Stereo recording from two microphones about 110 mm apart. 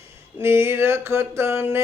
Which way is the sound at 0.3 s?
20° right (ahead or behind).